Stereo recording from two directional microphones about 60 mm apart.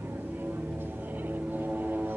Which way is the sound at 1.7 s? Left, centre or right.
Right.